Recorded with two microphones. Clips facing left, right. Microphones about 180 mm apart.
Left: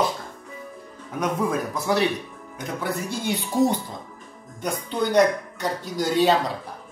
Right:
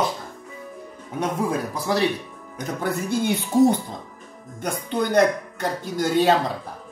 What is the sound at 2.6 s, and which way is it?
Speech, 45° right (ahead or behind).